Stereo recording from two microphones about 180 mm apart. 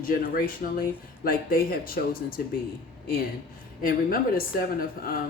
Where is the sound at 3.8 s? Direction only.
55° left (ahead or behind).